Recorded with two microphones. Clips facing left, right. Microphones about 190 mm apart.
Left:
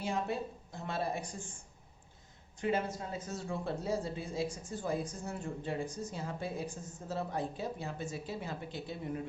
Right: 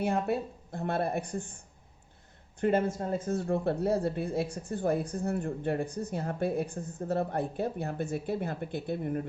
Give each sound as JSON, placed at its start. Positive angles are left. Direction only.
{"t": 0.0, "sound": "speech", "side_deg": -60}